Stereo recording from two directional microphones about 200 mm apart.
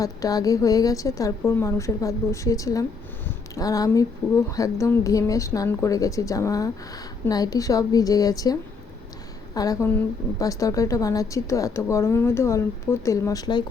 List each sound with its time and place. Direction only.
0.0 s a woman's voice: 20° left (ahead or behind)
9.6 s a woman's voice: 15° left (ahead or behind)